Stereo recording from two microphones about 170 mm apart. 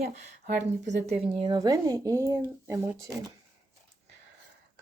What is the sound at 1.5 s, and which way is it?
Speech, 20° right (ahead or behind).